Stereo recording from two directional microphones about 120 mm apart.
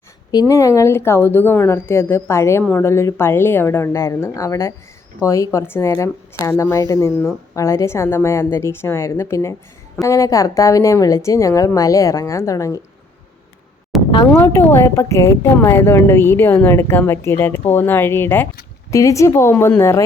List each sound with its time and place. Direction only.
0.3 s a woman's voice: 30° left (ahead or behind)
13.9 s a sound: centre (ahead or behind)
14.5 s a woman's voice: 20° left (ahead or behind)